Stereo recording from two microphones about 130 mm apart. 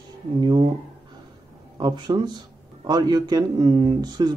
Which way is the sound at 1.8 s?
35° right (ahead or behind).